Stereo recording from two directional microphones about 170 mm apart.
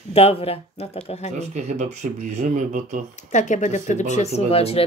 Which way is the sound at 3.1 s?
45° left (ahead or behind).